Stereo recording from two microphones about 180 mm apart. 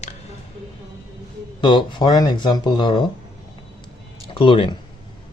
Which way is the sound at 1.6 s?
25° left (ahead or behind).